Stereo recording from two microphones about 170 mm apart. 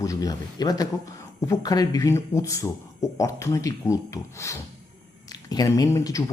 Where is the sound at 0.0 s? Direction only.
20° left (ahead or behind).